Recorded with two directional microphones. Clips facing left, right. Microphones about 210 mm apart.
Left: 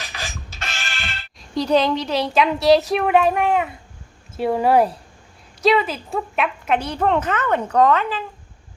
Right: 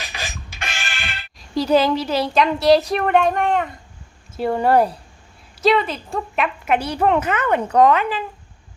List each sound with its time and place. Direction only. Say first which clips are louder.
0.0 s music: right 1 dB; 15° right (ahead or behind)
1.4 s a woman's voice: right 1 dB; 5° right (ahead or behind)